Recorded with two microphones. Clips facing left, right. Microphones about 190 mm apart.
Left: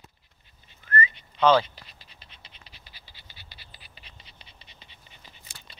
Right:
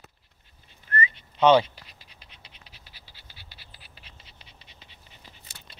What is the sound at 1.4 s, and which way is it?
Speech, 25° right (ahead or behind).